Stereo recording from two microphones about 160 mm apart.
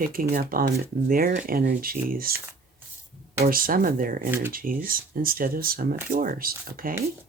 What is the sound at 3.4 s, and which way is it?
Speech, 65° right (ahead or behind).